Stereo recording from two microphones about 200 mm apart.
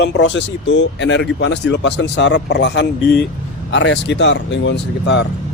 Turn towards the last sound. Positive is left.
turn(degrees=60)  # may be behind; listen again after turning